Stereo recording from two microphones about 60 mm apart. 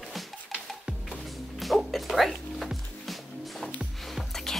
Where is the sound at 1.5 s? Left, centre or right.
Centre.